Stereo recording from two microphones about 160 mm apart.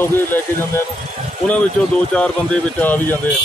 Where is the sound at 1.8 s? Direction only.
5° left (ahead or behind).